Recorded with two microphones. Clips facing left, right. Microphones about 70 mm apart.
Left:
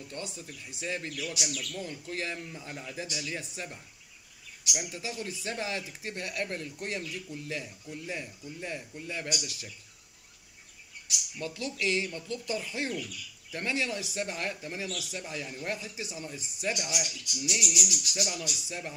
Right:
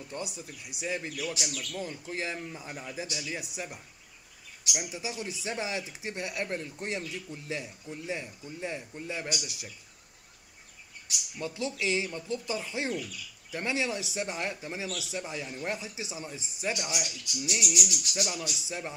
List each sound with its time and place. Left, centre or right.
0.1 s speech: centre; by 7.3 s right
7.4 s speech: right
11.3 s speech: right
17.7 s speech: right